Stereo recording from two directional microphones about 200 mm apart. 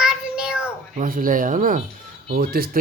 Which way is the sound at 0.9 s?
45° right (ahead or behind).